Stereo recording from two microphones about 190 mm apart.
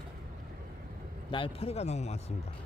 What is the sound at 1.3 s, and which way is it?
Speech, 25° left (ahead or behind).